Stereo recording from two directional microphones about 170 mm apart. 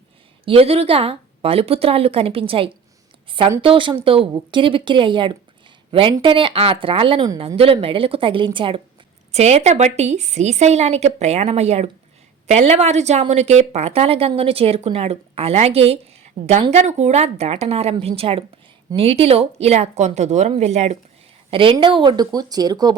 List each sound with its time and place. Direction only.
0.4 s a woman's voice: 35° right (ahead or behind)